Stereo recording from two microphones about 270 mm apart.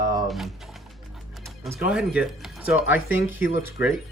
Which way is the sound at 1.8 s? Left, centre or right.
Centre.